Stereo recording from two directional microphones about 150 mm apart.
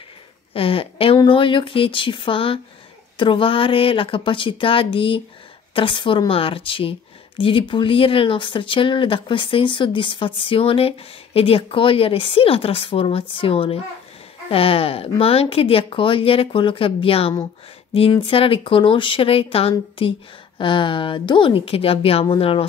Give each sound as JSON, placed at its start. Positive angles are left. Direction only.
{"t": 0.5, "sound": "a woman's voice", "side_deg": 40}